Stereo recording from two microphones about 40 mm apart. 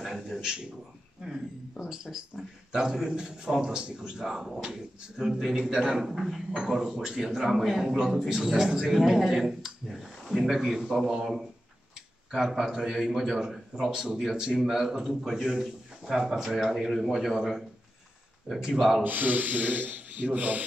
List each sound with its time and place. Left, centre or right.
0.0 s a sound: centre
1.8 s a man's voice: centre
4.2 s speech: centre
13.8 s speech: centre
19.0 s speech: right